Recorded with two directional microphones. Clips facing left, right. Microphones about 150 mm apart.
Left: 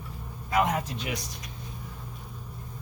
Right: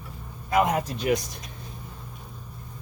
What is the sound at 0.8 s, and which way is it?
Speech, 45° right (ahead or behind).